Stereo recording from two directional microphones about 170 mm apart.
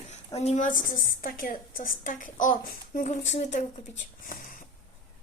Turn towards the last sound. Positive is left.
turn(degrees=55)  # may be behind; listen again after turning